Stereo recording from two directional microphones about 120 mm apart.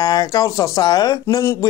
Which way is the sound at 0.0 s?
35° left (ahead or behind).